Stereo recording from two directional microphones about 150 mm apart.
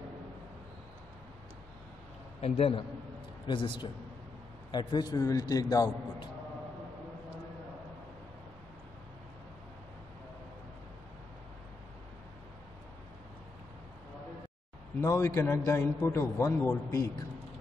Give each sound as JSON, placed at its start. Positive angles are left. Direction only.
{"t": 2.4, "sound": "a man's voice", "side_deg": 40}
{"t": 15.0, "sound": "a man's voice", "side_deg": 20}